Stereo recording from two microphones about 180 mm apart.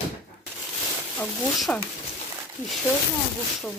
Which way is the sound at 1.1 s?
5° left (ahead or behind).